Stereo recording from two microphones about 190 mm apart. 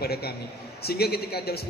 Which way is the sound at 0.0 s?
55° left (ahead or behind).